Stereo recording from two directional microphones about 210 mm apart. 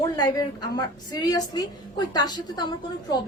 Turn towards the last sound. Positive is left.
turn(degrees=20)  # may be behind; listen again after turning